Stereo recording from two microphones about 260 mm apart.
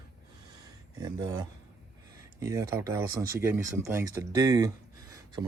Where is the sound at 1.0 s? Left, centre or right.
Centre.